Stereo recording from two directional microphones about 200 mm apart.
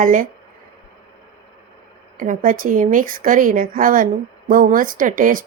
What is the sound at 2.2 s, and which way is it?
Speech, 40° right (ahead or behind).